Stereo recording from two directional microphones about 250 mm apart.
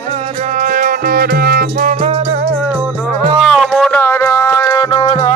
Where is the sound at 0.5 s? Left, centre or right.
Right.